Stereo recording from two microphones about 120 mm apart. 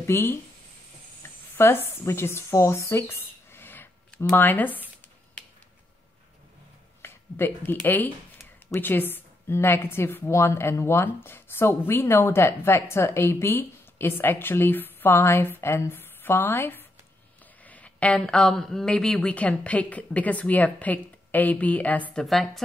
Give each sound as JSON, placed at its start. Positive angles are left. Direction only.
{"t": 0.0, "sound": "speech", "side_deg": 20}
{"t": 1.2, "sound": "a sound", "side_deg": 20}
{"t": 1.6, "sound": "speech", "side_deg": 20}
{"t": 5.4, "sound": "finger snapping", "side_deg": 10}
{"t": 7.0, "sound": "a woman's voice", "side_deg": 20}
{"t": 22.2, "sound": "speech", "side_deg": 0}